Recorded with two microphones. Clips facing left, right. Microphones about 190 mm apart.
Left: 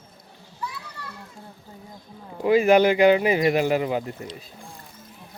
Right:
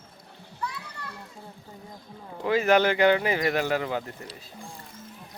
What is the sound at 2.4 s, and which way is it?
Speech, 15° left (ahead or behind).